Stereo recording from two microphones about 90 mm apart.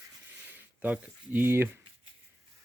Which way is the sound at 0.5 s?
20° right (ahead or behind).